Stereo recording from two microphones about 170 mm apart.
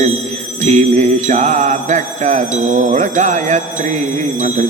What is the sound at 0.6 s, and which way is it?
Music, 40° right (ahead or behind).